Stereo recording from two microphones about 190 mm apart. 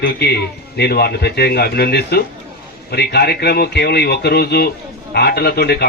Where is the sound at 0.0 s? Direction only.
60° left (ahead or behind).